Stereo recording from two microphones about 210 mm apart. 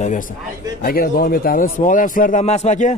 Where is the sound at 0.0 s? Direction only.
35° left (ahead or behind).